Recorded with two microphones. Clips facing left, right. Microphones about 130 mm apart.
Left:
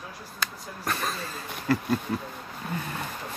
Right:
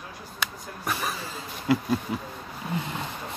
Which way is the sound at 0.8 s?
10° right (ahead or behind).